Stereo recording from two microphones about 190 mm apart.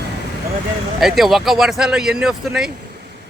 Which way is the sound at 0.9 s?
Centre (ahead or behind).